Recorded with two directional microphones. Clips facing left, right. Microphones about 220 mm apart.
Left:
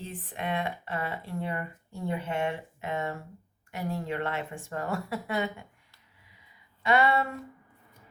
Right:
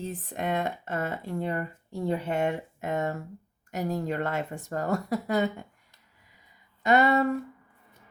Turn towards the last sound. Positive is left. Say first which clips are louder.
# right 3 dB
turn(degrees=-40)  # may be behind; listen again after turning